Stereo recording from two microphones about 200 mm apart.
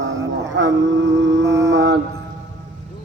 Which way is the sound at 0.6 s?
60° right (ahead or behind).